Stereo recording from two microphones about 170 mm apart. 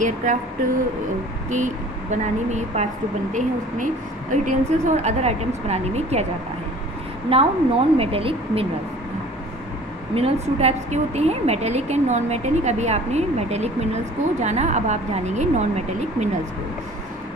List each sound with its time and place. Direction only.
0.0 s speech: 45° right (ahead or behind)
1.5 s a woman's voice: 45° right (ahead or behind)
7.2 s a woman's voice: 35° right (ahead or behind)
10.1 s a woman's voice: 35° right (ahead or behind)